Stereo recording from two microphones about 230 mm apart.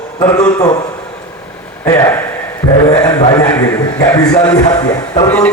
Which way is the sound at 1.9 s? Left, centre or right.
Centre.